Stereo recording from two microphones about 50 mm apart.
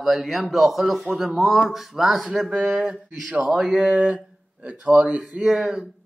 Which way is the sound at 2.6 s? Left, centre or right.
Right.